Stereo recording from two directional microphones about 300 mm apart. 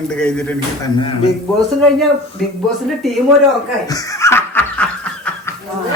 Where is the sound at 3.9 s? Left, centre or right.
Centre.